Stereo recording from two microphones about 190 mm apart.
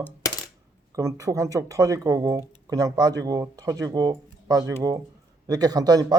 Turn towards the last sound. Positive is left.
turn(degrees=-20)  # may be behind; listen again after turning